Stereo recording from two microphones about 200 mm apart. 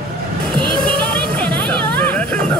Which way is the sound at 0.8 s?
5° left (ahead or behind).